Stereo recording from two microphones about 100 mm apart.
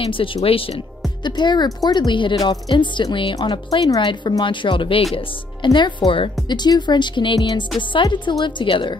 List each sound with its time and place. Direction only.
0.0 s speech: 70° left (ahead or behind)
1.2 s a woman's voice: 50° left (ahead or behind)